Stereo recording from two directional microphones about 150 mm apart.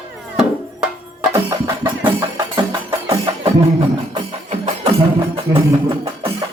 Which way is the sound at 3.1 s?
35° right (ahead or behind).